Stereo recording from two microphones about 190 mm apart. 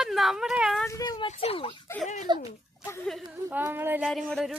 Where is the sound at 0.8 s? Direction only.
20° left (ahead or behind).